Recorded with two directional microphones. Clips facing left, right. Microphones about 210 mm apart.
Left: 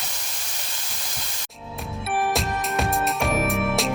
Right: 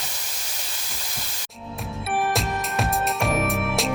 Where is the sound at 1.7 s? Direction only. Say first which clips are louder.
Even; centre (ahead or behind).